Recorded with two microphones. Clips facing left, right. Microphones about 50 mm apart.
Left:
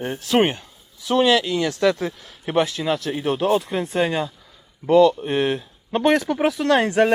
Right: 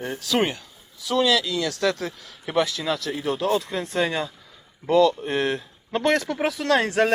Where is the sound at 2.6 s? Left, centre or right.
Centre.